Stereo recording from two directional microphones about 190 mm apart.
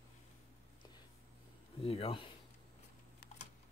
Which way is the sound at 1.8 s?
30° left (ahead or behind).